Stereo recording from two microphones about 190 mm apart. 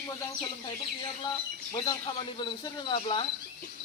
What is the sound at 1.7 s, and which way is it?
Speech, 25° left (ahead or behind).